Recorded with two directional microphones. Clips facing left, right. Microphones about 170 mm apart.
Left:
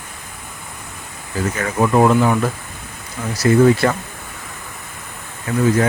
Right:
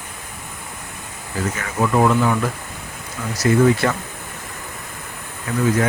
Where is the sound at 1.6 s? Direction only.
35° left (ahead or behind).